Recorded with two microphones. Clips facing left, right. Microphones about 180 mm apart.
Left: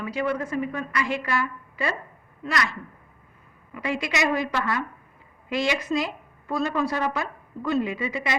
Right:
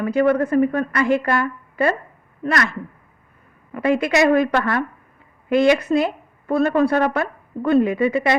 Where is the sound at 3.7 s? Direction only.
55° right (ahead or behind).